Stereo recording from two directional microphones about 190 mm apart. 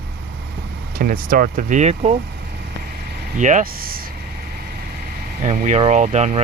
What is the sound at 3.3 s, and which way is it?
Speech, 40° right (ahead or behind).